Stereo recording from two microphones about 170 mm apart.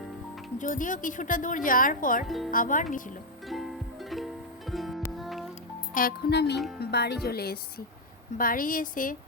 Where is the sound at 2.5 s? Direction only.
50° left (ahead or behind).